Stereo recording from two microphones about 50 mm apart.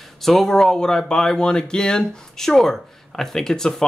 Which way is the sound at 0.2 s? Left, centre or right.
Centre.